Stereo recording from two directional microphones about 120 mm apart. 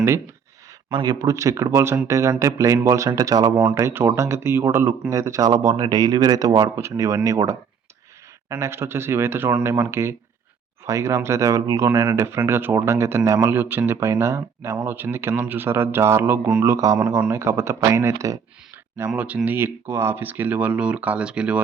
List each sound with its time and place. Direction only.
0.9 s speech: 35° right (ahead or behind)
18.9 s speech: 15° right (ahead or behind)